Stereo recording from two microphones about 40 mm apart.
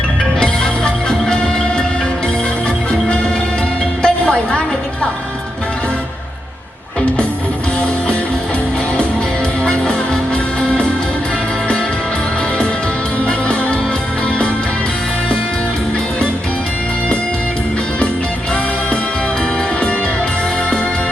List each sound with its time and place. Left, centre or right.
4.0 s music: left
10.6 s music: left
13.2 s music: left